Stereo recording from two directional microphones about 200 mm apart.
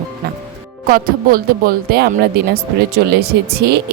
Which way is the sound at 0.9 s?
45° right (ahead or behind).